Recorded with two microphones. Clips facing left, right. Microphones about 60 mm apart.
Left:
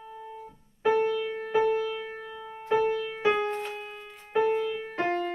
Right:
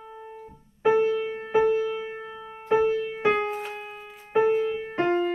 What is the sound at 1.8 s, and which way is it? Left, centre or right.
Music, centre.